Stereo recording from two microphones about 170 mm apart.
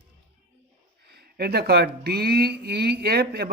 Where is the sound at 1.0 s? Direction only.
70° right (ahead or behind).